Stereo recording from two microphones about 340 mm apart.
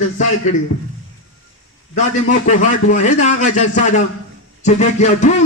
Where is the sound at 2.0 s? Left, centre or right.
Left.